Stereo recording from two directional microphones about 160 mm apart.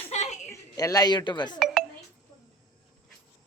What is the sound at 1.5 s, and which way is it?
Speech, centre (ahead or behind).